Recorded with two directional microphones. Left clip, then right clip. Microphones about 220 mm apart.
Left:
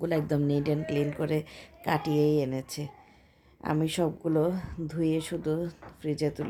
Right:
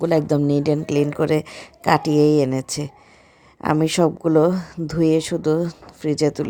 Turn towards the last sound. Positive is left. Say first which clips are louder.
# right 11 dB
turn(degrees=-30)  # may be behind; listen again after turning